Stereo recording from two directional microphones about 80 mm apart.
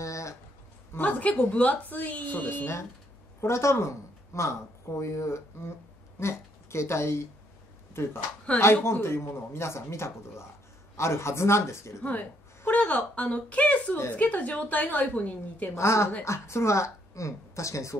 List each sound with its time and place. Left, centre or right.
0.0 s a sound: left
0.9 s speech: left
8.5 s a woman's voice: centre
8.8 s speech: left
12.0 s a woman's voice: left
15.7 s speech: left